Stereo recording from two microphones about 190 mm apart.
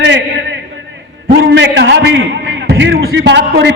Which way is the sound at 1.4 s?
70° right (ahead or behind).